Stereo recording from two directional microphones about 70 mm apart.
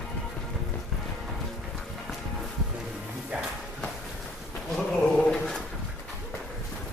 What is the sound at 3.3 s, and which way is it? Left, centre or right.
Walk, centre.